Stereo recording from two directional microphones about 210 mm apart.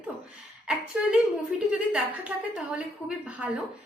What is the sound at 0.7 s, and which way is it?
A woman's voice, 5° right (ahead or behind).